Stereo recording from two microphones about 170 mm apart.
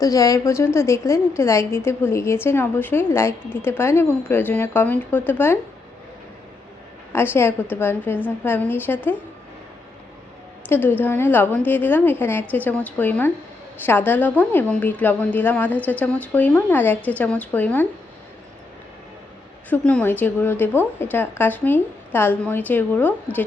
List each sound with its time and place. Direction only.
0.0 s a woman's voice: 20° left (ahead or behind)
7.1 s a woman's voice: 15° left (ahead or behind)
10.7 s a woman's voice: 10° left (ahead or behind)
19.7 s a woman's voice: 5° left (ahead or behind)